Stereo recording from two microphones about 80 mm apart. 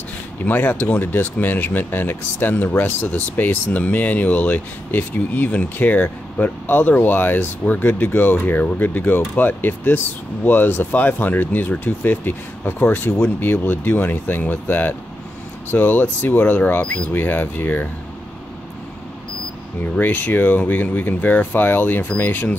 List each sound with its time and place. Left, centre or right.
0.5 s speech: left
19.8 s speech: left